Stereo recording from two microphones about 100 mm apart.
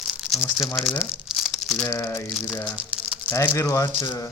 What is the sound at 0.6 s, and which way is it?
Speech, centre (ahead or behind).